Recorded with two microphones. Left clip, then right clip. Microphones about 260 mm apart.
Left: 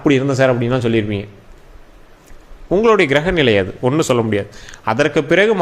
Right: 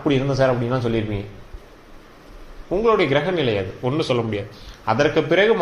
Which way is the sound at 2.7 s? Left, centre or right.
Left.